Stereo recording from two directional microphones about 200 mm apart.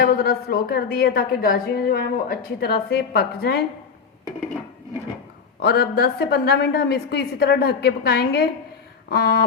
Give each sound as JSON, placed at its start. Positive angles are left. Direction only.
{"t": 0.0, "sound": "a woman's voice", "side_deg": 50}
{"t": 5.5, "sound": "a woman's voice", "side_deg": 55}